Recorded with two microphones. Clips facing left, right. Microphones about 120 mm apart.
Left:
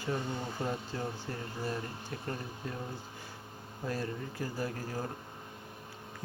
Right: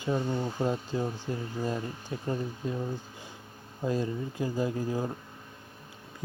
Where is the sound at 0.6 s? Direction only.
20° right (ahead or behind).